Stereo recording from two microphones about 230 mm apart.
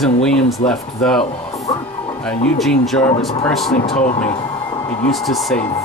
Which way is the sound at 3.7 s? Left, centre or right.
Left.